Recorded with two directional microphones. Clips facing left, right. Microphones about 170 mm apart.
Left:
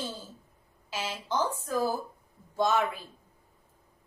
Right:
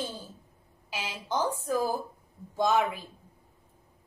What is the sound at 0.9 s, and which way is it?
A woman's voice, 15° right (ahead or behind).